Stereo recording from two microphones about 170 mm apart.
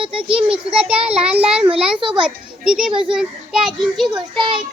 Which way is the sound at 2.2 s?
5° right (ahead or behind).